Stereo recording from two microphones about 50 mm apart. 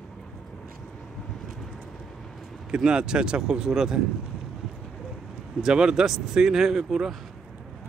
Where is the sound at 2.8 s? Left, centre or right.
Centre.